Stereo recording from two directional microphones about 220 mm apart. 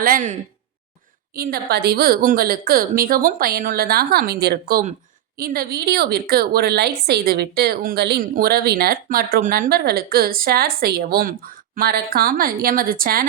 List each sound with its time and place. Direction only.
0.0 s speech: 35° right (ahead or behind)
1.4 s a woman's voice: 45° right (ahead or behind)